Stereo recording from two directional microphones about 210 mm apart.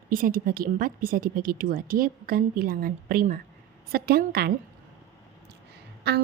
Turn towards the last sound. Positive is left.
turn(degrees=-55)  # may be behind; listen again after turning